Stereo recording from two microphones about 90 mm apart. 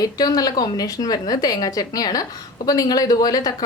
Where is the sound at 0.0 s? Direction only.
45° left (ahead or behind).